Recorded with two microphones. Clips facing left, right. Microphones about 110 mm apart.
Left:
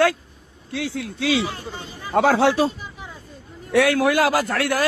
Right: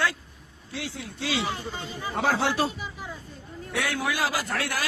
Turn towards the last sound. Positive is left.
turn(degrees=70)  # may be behind; listen again after turning